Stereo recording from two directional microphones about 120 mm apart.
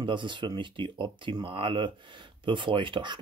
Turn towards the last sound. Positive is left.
turn(degrees=-40)  # may be behind; listen again after turning